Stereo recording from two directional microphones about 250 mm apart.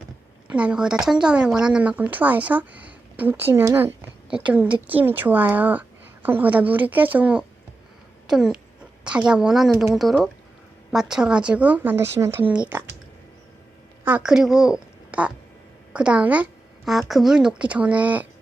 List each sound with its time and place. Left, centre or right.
0.5 s speech: centre
14.0 s a woman's voice: centre